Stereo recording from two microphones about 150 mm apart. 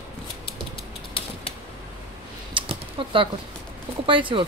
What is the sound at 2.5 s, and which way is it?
Typing, 35° right (ahead or behind).